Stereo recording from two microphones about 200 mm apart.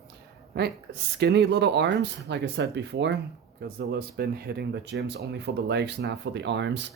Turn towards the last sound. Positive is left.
turn(degrees=-60)  # may be behind; listen again after turning